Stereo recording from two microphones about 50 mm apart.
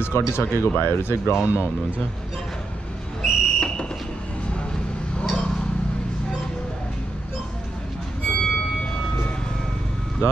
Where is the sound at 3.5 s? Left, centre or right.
Centre.